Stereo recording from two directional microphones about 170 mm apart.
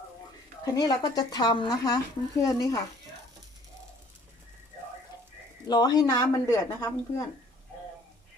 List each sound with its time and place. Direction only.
0.6 s speech: 25° left (ahead or behind)
5.6 s speech: 25° left (ahead or behind)